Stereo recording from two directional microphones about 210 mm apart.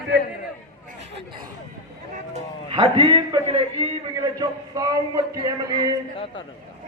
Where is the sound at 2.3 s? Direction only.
30° right (ahead or behind).